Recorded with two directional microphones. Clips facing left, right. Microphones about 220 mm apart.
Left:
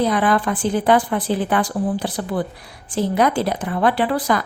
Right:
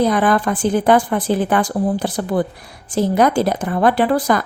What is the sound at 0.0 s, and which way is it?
Speech, 45° right (ahead or behind).